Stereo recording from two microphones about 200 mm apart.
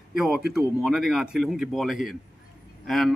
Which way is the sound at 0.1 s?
Centre (ahead or behind).